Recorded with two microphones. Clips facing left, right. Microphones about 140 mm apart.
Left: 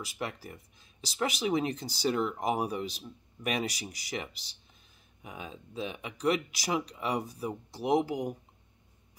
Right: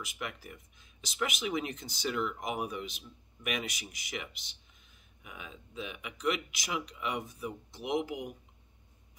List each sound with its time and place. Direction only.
0.0 s speech: 35° left (ahead or behind)